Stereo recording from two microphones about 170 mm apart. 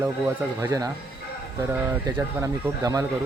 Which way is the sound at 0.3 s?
20° right (ahead or behind).